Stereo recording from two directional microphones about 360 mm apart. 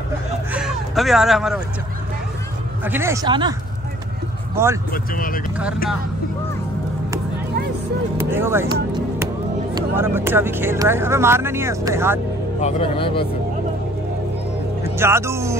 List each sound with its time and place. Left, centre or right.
0.5 s a sound: centre
2.8 s speech: centre
4.6 s speech: centre
4.9 s speech: left
8.2 s speech: centre
12.5 s speech: centre
15.0 s speech: centre